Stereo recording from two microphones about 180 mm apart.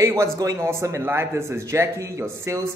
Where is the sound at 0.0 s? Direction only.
15° right (ahead or behind).